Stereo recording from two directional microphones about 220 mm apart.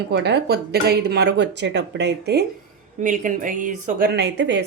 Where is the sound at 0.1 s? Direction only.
50° right (ahead or behind).